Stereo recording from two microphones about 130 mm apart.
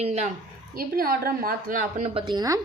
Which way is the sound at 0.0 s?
55° right (ahead or behind).